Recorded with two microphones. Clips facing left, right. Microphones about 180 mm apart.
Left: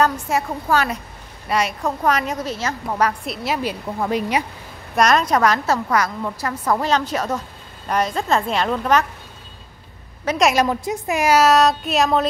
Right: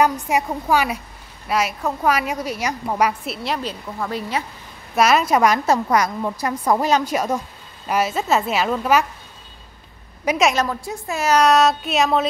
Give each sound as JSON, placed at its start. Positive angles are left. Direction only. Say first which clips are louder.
{"t": 0.0, "sound": "a woman's voice", "louder": "right 1 dB", "side_deg": -15}
{"t": 3.4, "sound": "a woman's voice", "louder": "left 3 dB", "side_deg": 5}
{"t": 4.0, "sound": "a woman's voice", "louder": "left 4 dB", "side_deg": 20}
{"t": 4.9, "sound": "a woman's voice", "louder": "even", "side_deg": -5}
{"t": 10.2, "sound": "a woman's voice", "louder": "even", "side_deg": -5}
{"t": 10.5, "sound": "a woman's voice", "louder": "left 4 dB", "side_deg": 15}